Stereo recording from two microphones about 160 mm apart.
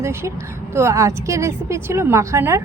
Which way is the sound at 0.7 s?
20° right (ahead or behind).